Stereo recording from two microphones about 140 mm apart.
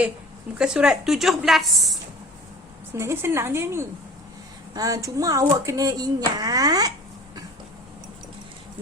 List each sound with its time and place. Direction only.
0.6 s a woman's voice: 5° right (ahead or behind)
2.9 s speech: 20° right (ahead or behind)